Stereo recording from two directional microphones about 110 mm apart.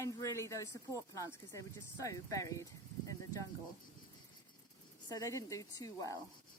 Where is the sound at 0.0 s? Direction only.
30° left (ahead or behind).